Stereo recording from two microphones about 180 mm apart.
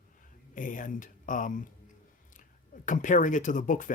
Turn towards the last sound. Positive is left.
turn(degrees=45)  # may be behind; listen again after turning